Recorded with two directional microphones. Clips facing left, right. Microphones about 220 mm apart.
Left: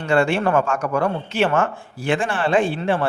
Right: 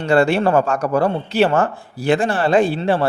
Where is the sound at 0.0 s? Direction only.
35° right (ahead or behind).